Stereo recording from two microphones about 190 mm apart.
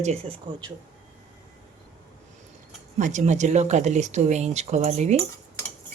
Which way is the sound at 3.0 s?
40° right (ahead or behind).